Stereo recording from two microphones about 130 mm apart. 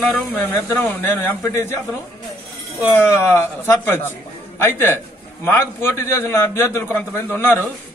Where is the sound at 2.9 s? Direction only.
20° left (ahead or behind).